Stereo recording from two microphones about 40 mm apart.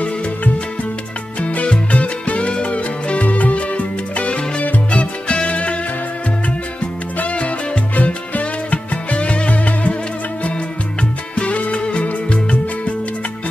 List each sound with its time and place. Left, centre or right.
1.4 s music: left
7.3 s music: left
11.3 s music: left